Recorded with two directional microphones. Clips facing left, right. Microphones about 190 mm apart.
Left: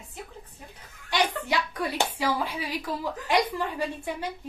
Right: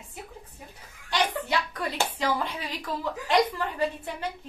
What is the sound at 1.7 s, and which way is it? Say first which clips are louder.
Speech: left 2 dB; 10° left (ahead or behind).